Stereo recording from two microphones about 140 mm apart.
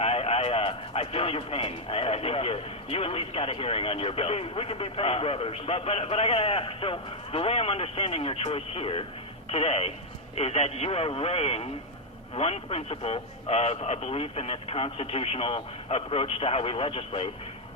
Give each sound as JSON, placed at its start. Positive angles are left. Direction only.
{"t": 0.0, "sound": "a man's voice", "side_deg": 45}